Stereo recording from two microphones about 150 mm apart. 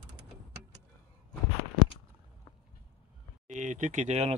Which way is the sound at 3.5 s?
55° right (ahead or behind).